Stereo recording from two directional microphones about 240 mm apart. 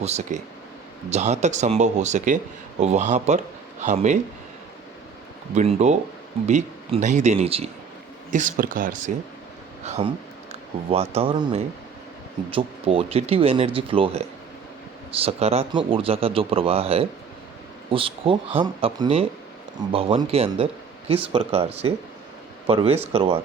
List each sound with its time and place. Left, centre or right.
0.0 s speech: right
5.5 s speech: right